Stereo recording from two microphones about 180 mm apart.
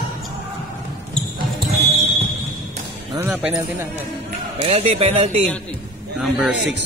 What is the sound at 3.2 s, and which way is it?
Music, 10° right (ahead or behind).